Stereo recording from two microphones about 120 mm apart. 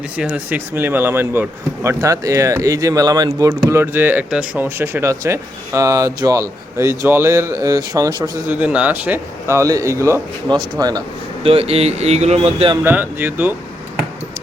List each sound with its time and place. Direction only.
0.2 s speech: 15° right (ahead or behind); by 3.5 s 30° right (ahead or behind)
3.7 s speech: 20° right (ahead or behind)
8.4 s speech: 10° right (ahead or behind); by 11.0 s 35° right (ahead or behind)
11.4 s speech: 55° right (ahead or behind)
12.8 s speech: 15° right (ahead or behind)